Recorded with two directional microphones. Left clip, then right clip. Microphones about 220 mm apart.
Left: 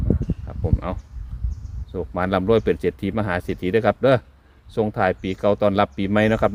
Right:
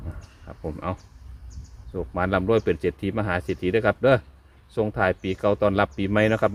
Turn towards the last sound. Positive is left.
turn(degrees=35)  # may be behind; listen again after turning